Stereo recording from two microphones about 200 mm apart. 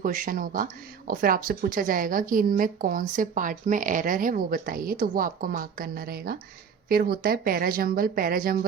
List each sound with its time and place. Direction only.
0.0 s speech: 45° right (ahead or behind)